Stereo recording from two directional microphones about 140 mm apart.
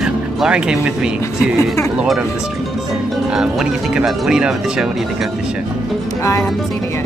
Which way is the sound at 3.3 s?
5° right (ahead or behind).